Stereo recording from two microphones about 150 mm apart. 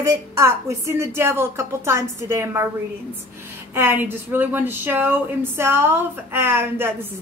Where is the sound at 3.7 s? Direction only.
15° right (ahead or behind).